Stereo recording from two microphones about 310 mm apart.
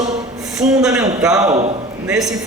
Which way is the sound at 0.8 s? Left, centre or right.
Centre.